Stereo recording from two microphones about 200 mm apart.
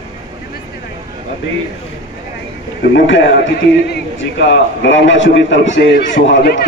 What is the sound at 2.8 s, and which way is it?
A man's voice, 60° left (ahead or behind).